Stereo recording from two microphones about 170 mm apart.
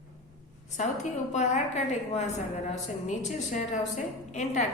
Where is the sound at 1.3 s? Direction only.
45° left (ahead or behind).